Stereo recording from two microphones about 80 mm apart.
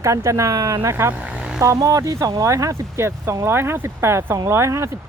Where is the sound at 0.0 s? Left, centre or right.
Right.